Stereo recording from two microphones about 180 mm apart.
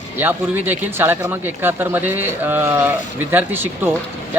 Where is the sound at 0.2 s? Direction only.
10° right (ahead or behind).